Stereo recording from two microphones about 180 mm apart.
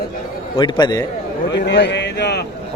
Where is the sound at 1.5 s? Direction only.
70° left (ahead or behind).